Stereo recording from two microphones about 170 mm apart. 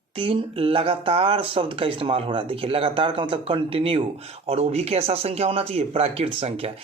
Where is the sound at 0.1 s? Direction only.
30° right (ahead or behind).